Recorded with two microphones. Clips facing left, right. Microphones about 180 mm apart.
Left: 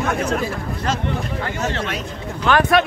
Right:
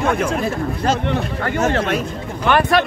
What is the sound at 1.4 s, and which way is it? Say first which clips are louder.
Speech: right 8 dB; 55° right (ahead or behind).